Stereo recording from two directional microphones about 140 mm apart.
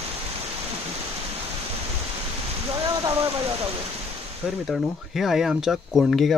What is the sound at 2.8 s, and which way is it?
Rain, 25° right (ahead or behind).